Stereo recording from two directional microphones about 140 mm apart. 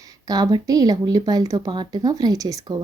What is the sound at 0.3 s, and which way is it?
Speech, 25° right (ahead or behind).